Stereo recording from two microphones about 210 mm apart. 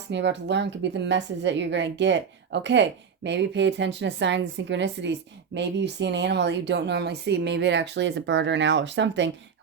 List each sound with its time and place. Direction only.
0.1 s a woman's voice: 55° right (ahead or behind)